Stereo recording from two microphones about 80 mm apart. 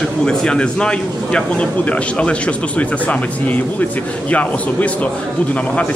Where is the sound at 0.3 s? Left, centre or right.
Centre.